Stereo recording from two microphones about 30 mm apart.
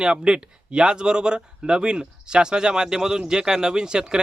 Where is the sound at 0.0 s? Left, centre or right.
Right.